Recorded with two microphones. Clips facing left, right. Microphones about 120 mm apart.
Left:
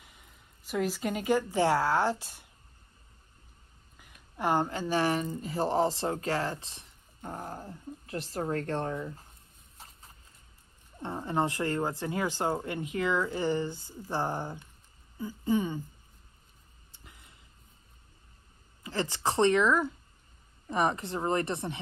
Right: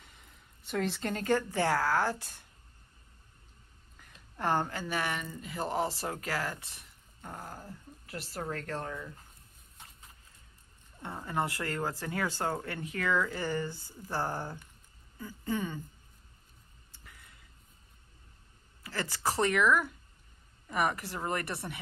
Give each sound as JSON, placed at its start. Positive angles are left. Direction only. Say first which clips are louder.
{"t": 0.0, "sound": "speech", "louder": "left 1 dB", "side_deg": 5}
{"t": 3.9, "sound": "a woman's voice", "louder": "left 2 dB", "side_deg": 10}
{"t": 9.8, "sound": "horse", "louder": "left 2 dB", "side_deg": 35}
{"t": 11.2, "sound": "speech", "louder": "left 4 dB", "side_deg": 20}
{"t": 17.0, "sound": "a sound", "louder": "left 1 dB", "side_deg": 20}
{"t": 18.8, "sound": "speech", "louder": "left 4 dB", "side_deg": 20}